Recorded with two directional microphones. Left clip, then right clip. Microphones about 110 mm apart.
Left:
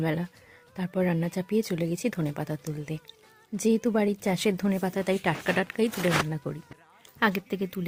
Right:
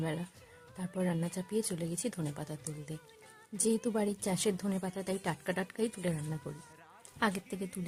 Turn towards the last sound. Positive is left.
turn(degrees=40)  # may be behind; listen again after turning